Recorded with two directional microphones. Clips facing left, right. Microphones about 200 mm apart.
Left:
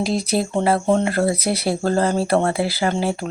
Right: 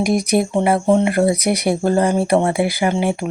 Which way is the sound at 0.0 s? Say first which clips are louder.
Right 4 dB; 15° right (ahead or behind).